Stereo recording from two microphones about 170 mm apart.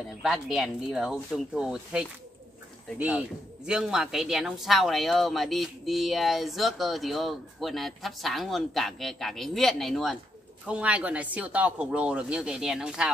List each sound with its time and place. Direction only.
0.2 s speech: centre (ahead or behind)